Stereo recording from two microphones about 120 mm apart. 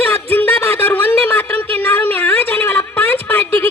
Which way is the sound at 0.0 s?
15° left (ahead or behind).